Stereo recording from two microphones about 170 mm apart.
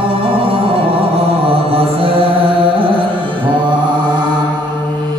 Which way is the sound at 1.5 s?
35° right (ahead or behind).